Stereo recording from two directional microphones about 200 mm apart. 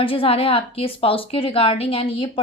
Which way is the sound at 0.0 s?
25° left (ahead or behind).